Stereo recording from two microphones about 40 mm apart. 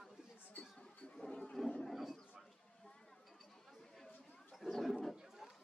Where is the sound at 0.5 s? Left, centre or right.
Left.